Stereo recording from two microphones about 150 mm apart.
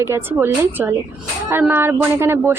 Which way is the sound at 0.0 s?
15° right (ahead or behind).